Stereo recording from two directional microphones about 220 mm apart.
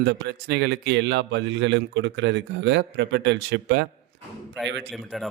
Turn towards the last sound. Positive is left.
turn(degrees=0)  # may be behind; listen again after turning